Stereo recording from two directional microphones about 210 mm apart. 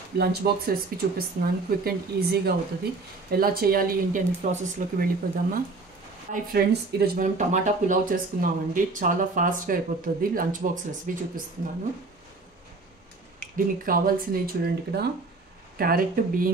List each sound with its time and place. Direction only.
0.2 s speech: 45° right (ahead or behind)
13.8 s speech: 40° right (ahead or behind)